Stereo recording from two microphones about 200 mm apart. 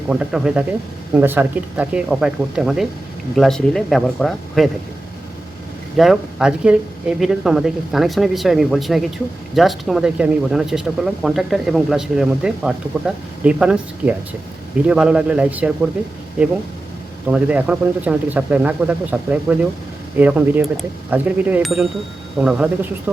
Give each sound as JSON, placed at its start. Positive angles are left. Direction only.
{"t": 0.1, "sound": "speech", "side_deg": -5}
{"t": 6.0, "sound": "speech", "side_deg": 0}
{"t": 17.3, "sound": "speech", "side_deg": -5}